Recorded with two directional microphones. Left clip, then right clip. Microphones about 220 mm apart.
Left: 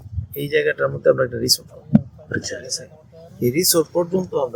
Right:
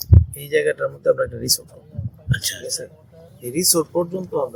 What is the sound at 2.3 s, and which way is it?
Speech, 45° right (ahead or behind).